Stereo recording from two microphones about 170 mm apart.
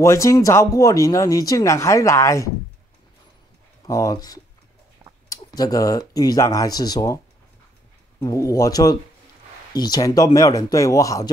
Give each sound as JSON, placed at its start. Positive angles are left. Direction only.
{"t": 0.0, "sound": "speech", "side_deg": 15}
{"t": 3.8, "sound": "speech", "side_deg": 20}
{"t": 8.2, "sound": "speech", "side_deg": 20}